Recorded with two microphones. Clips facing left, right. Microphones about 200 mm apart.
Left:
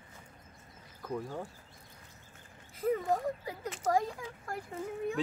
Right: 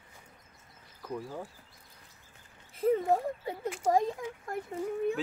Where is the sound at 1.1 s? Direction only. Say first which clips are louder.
Left 1 dB; centre (ahead or behind).